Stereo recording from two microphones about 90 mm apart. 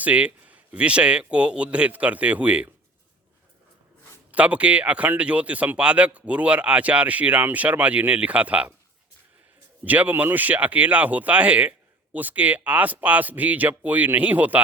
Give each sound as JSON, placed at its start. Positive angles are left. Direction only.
{"t": 0.0, "sound": "speech", "side_deg": -15}
{"t": 4.3, "sound": "speech", "side_deg": -15}
{"t": 9.8, "sound": "speech", "side_deg": -20}